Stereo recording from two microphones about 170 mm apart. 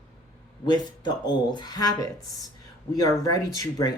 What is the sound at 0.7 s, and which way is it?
Speech, 25° left (ahead or behind).